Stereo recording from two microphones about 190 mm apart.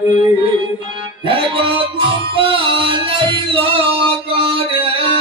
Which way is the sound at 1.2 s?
30° right (ahead or behind).